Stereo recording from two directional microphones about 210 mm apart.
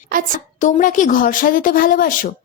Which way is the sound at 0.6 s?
35° left (ahead or behind).